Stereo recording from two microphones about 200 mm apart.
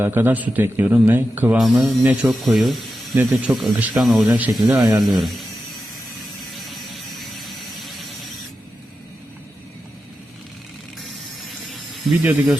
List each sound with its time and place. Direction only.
0.0 s a man's voice: 10° right (ahead or behind)
6.5 s vehicle: centre (ahead or behind)
12.2 s a man's voice: 5° right (ahead or behind)